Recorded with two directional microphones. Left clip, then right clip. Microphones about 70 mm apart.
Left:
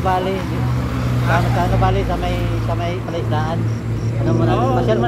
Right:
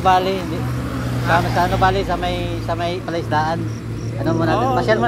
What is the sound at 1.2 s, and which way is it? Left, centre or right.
Speech, right.